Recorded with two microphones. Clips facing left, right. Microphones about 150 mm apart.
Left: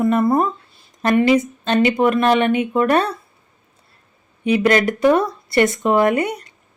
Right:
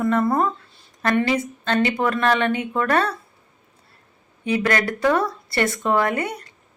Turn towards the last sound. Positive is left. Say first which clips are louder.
# left 6 dB
turn(degrees=15)  # may be behind; listen again after turning